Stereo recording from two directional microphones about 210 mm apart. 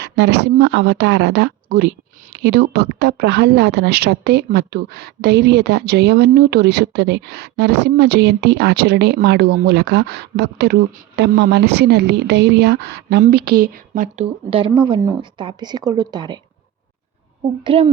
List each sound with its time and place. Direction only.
0.0 s a woman's voice: 55° right (ahead or behind); by 16.4 s 20° right (ahead or behind)
17.4 s speech: 25° right (ahead or behind)